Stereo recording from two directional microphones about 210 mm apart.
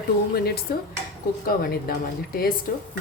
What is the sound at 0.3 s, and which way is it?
Speech, 45° left (ahead or behind).